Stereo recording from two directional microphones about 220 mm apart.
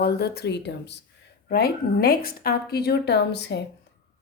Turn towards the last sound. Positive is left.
turn(degrees=50)  # may be behind; listen again after turning